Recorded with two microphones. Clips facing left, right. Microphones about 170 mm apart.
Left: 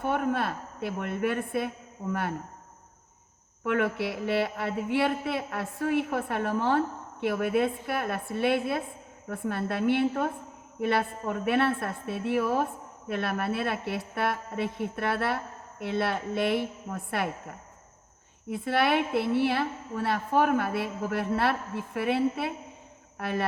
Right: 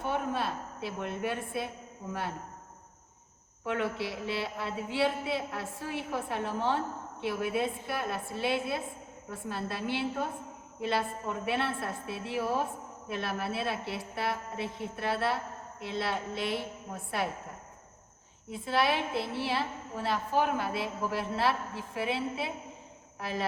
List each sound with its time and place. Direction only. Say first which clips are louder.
0.0 s a man's voice: left 4 dB; 55° left (ahead or behind)
3.6 s a man's voice: left 5 dB; 60° left (ahead or behind)
18.5 s a man's voice: left 4 dB; 60° left (ahead or behind)